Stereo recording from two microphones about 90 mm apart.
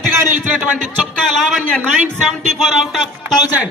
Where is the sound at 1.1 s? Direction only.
5° left (ahead or behind).